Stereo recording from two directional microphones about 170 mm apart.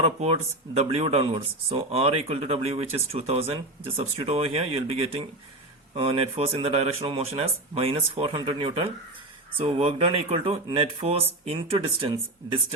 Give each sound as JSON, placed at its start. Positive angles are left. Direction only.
{"t": 0.0, "sound": "speech", "side_deg": -35}